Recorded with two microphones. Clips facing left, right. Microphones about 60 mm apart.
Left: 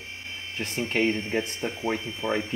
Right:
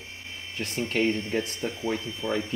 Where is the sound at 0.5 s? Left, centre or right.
Left.